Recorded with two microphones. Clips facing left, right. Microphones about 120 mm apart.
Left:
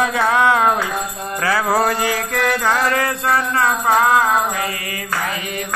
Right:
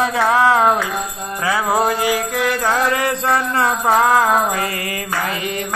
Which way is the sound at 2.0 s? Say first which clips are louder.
Right 1 dB; 10° right (ahead or behind).